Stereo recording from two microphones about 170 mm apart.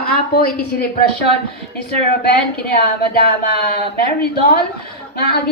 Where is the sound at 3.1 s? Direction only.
65° left (ahead or behind).